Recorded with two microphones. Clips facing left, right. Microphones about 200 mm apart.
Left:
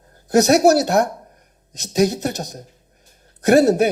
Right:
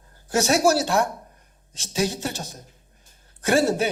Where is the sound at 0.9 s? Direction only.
40° left (ahead or behind).